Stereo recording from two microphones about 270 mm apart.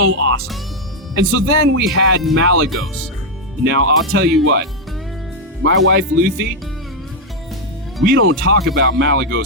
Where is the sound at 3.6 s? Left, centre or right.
Right.